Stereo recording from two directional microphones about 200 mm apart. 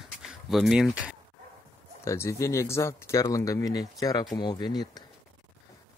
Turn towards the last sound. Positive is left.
turn(degrees=20)  # may be behind; listen again after turning